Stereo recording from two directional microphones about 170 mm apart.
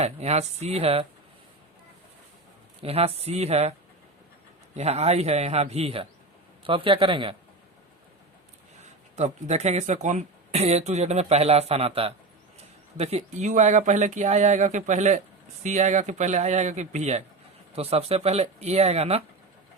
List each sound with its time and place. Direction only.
0.0 s speech: 40° right (ahead or behind)
2.8 s speech: 35° right (ahead or behind)
9.1 s speech: 40° right (ahead or behind)